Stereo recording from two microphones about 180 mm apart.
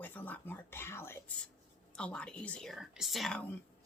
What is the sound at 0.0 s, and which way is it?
Speech, 10° left (ahead or behind).